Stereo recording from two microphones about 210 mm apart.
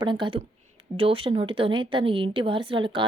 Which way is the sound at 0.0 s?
20° right (ahead or behind).